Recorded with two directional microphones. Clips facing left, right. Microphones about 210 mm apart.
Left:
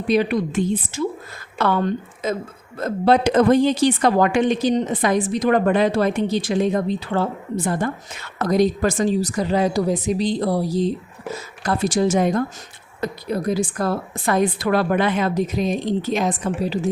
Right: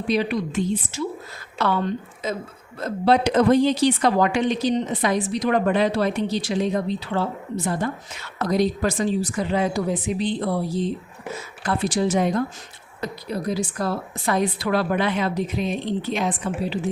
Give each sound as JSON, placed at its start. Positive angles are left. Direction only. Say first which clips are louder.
{"t": 0.1, "sound": "a woman's voice", "louder": "left 4 dB", "side_deg": 50}